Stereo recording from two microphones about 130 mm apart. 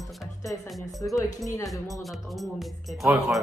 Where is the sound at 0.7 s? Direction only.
Centre (ahead or behind).